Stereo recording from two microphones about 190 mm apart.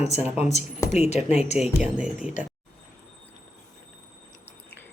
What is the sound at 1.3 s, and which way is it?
Speech, 35° left (ahead or behind).